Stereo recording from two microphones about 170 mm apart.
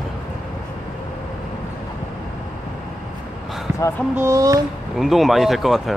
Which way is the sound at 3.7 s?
10° right (ahead or behind).